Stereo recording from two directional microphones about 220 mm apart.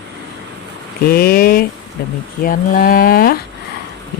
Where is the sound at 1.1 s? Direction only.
45° left (ahead or behind).